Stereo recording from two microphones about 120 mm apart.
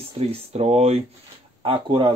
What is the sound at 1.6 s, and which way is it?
Speech, 45° right (ahead or behind).